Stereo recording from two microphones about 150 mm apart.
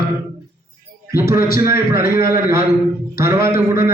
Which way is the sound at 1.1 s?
20° right (ahead or behind).